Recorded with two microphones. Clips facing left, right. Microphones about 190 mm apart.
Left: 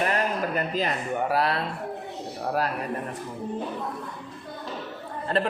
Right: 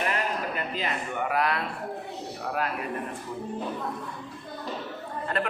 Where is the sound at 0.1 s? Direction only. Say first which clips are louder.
Left 4 dB; 40° left (ahead or behind).